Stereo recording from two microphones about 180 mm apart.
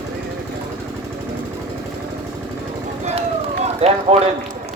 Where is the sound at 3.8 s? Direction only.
35° right (ahead or behind).